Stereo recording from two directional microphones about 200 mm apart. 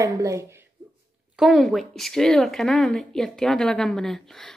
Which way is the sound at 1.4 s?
Centre (ahead or behind).